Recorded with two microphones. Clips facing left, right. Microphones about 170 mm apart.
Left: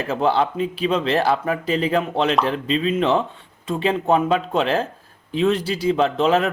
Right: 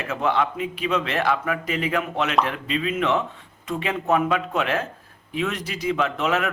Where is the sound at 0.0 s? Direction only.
30° left (ahead or behind).